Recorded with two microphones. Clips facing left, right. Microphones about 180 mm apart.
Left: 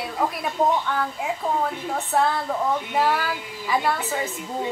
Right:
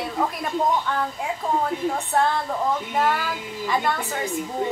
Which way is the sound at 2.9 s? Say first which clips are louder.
Left 1 dB; centre (ahead or behind).